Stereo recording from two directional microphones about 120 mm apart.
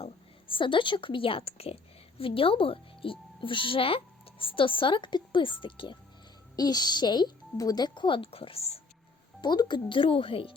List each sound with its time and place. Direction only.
0.0 s a woman's voice: 45° left (ahead or behind)
9.4 s speech: 35° left (ahead or behind)